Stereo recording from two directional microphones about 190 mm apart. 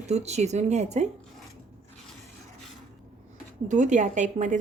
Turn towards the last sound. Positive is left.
turn(degrees=-40)  # may be behind; listen again after turning